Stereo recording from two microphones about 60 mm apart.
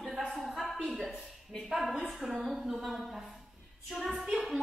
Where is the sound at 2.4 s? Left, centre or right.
Centre.